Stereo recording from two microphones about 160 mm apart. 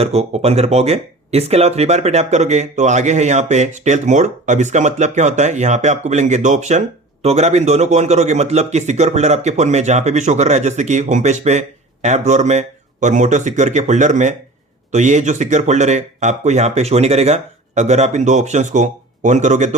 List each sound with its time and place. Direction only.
0.0 s speech: 40° right (ahead or behind)